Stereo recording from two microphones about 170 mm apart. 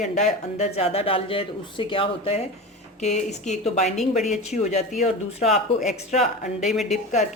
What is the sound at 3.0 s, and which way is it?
Speech, 45° left (ahead or behind).